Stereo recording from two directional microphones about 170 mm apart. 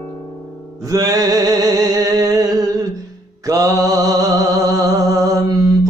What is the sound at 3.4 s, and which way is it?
Mantra, 20° right (ahead or behind).